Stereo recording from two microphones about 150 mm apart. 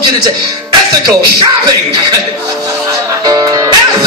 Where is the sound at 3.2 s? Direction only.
25° right (ahead or behind).